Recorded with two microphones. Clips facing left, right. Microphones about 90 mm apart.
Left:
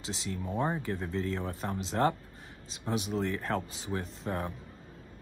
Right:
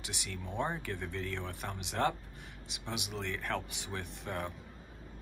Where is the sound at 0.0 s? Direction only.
25° left (ahead or behind).